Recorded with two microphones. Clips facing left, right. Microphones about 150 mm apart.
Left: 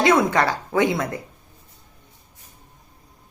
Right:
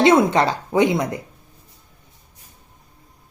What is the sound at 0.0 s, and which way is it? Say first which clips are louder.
Speech: right 3 dB; 25° right (ahead or behind).